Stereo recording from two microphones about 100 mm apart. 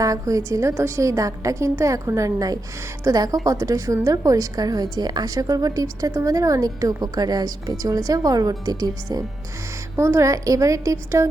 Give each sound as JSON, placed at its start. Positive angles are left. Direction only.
{"t": 0.0, "sound": "a woman's voice", "side_deg": -35}